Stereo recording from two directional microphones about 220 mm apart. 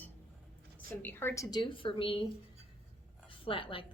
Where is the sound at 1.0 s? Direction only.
10° left (ahead or behind).